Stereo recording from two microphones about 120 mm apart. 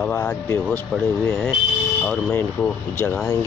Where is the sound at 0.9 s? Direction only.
Centre (ahead or behind).